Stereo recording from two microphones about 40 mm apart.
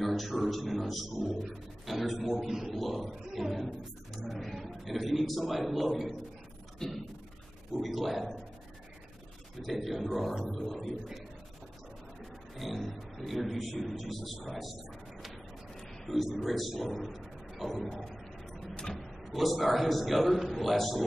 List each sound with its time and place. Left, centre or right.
0.0 s speech: centre
2.4 s a man's voice: centre
2.7 s speech: centre
6.8 s a sound: centre
7.8 s speech: centre
9.6 s speech: centre
12.5 s speech: centre
15.2 s a sound: centre
16.3 s speech: centre
17.6 s a sound: centre
18.9 s speech: centre